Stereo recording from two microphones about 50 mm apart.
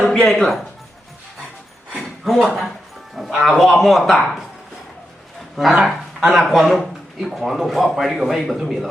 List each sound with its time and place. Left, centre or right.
0.0 s speech: centre
2.0 s a sound: centre
3.2 s a man's voice: centre
4.1 s speech: centre
5.8 s a man's voice: centre